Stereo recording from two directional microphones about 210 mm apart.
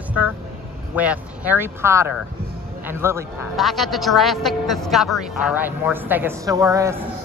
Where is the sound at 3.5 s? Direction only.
Centre (ahead or behind); by 7.0 s 15° right (ahead or behind).